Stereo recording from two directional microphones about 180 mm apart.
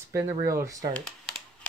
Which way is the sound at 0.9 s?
Centre (ahead or behind).